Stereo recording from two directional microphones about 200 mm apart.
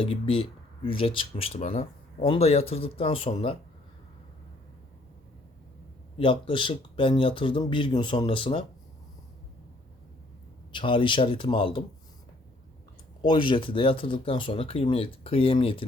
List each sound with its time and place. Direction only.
0.0 s speech: 25° left (ahead or behind)
6.1 s speech: 25° left (ahead or behind)
10.7 s speech: 25° left (ahead or behind)
13.2 s speech: 25° left (ahead or behind)